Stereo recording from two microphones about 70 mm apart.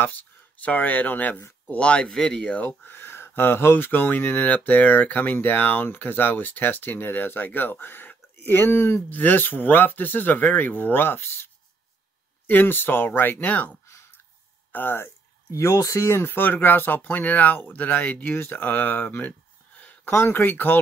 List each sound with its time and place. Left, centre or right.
0.0 s speech: left
13.8 s a sound: left
14.7 s speech: left
15.5 s speech: left
20.1 s speech: left